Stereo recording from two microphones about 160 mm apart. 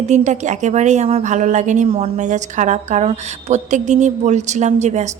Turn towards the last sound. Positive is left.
turn(degrees=-45)  # may be behind; listen again after turning